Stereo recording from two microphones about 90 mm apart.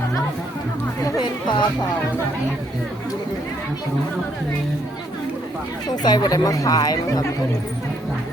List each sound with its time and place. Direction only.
1.2 s speech: 60° left (ahead or behind)
6.0 s speech: 50° left (ahead or behind)